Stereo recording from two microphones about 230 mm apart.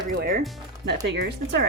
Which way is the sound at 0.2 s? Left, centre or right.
Right.